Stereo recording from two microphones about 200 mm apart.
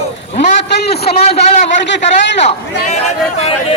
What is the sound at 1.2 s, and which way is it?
Speech, 35° left (ahead or behind).